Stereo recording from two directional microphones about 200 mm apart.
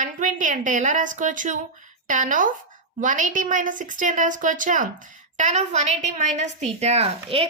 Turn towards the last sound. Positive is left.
turn(degrees=-30)  # may be behind; listen again after turning